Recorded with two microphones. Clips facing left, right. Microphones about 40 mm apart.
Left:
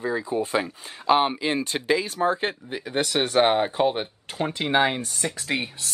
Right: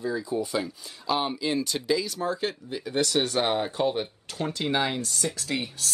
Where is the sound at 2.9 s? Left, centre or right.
Left.